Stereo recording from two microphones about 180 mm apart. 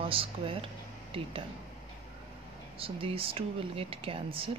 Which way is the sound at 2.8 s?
30° right (ahead or behind).